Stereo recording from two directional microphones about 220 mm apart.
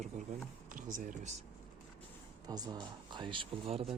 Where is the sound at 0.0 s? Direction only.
35° right (ahead or behind).